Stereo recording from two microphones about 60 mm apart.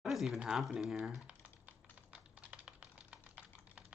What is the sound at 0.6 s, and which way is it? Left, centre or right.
Speech, centre.